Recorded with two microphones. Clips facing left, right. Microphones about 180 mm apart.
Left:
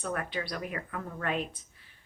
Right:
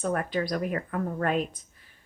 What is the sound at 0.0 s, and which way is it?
Speech, 45° right (ahead or behind).